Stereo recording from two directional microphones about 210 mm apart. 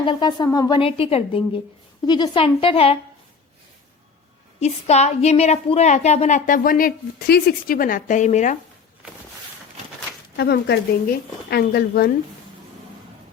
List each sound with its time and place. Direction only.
0.0 s a woman's voice: 20° left (ahead or behind)
4.6 s a woman's voice: 30° left (ahead or behind)
10.3 s a woman's voice: 50° left (ahead or behind)